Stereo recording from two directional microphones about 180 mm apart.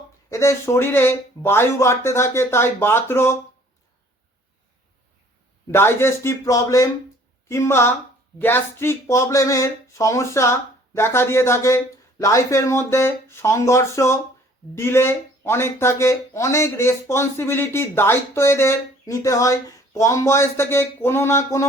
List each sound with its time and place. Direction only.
0.3 s speech: 15° left (ahead or behind)
5.6 s speech: 15° left (ahead or behind)